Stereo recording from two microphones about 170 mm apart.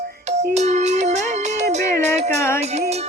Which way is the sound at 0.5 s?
40° right (ahead or behind).